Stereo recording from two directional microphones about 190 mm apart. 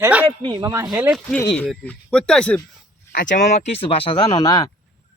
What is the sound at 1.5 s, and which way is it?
Speech, 5° left (ahead or behind).